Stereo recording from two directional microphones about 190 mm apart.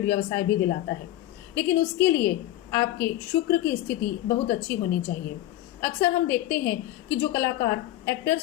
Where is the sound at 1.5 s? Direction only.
10° left (ahead or behind).